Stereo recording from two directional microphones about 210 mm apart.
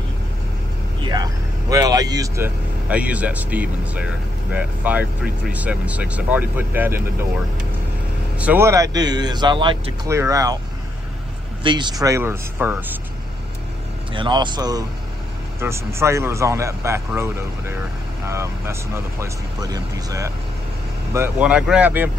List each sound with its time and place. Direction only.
1.0 s speech: 20° right (ahead or behind)
8.4 s speech: 10° right (ahead or behind)
11.6 s speech: 20° right (ahead or behind)
14.1 s speech: 20° right (ahead or behind)